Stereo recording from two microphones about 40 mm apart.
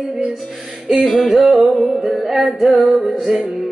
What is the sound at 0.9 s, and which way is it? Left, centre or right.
Music, centre.